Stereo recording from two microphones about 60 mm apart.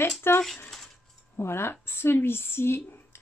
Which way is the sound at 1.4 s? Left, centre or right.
Left.